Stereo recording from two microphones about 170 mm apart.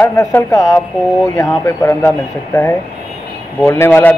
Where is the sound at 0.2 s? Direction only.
15° left (ahead or behind).